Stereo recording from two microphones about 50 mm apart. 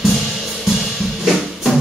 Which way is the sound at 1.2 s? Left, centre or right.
Centre.